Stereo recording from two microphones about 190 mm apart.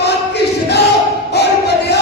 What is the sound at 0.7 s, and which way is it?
Battle cry, 60° left (ahead or behind).